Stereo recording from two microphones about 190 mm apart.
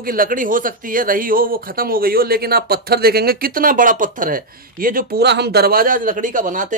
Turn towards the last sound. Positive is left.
turn(degrees=-45)  # may be behind; listen again after turning